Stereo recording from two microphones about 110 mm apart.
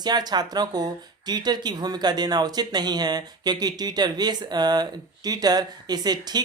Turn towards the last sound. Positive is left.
turn(degrees=-40)  # may be behind; listen again after turning